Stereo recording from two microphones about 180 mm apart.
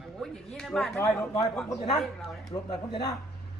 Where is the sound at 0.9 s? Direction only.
10° left (ahead or behind).